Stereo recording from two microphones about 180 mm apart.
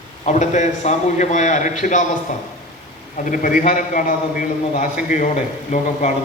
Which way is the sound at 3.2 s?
45° left (ahead or behind).